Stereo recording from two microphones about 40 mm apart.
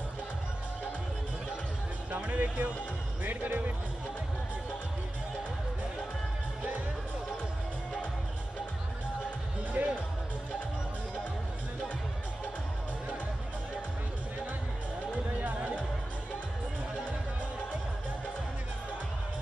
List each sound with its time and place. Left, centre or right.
2.0 s music: right
3.3 s speech: right
9.8 s music: right
15.4 s music: right